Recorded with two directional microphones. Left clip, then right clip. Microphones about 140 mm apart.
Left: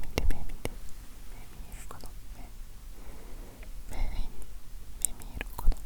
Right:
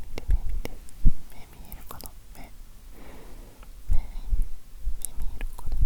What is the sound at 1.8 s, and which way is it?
Whispering, 20° right (ahead or behind).